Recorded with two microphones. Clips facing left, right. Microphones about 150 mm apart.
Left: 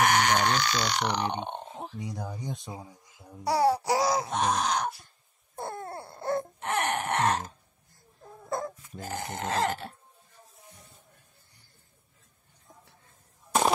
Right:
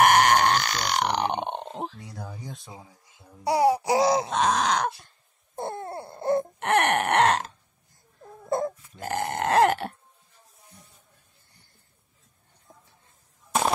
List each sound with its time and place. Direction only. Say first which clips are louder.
0.1 s burping: right 5 dB; 55° right (ahead or behind); by 2.0 s 90° right
2.0 s speech: left 3 dB; 15° left (ahead or behind)
3.4 s groan: right 3 dB; 15° right (ahead or behind)
4.3 s groan: right 4 dB; 90° right
5.6 s a sound: right 4 dB; 25° right (ahead or behind)
6.6 s a sound: right 7 dB; 70° right (ahead or behind)
8.5 s baby cry: right 6 dB; 25° right (ahead or behind)
9.0 s burping: right 7 dB; 70° right (ahead or behind)
13.5 s a sound: even; centre (ahead or behind)